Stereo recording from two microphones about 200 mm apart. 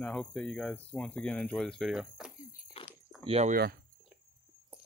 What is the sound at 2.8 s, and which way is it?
Biting, 25° left (ahead or behind).